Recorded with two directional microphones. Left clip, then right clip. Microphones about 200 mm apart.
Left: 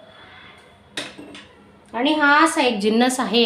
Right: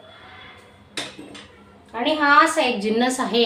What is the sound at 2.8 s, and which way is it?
Speech, 40° left (ahead or behind).